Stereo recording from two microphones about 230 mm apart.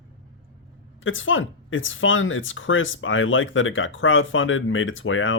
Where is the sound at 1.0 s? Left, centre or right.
Left.